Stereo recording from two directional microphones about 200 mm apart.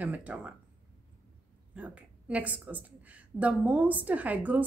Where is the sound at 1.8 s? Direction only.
5° right (ahead or behind).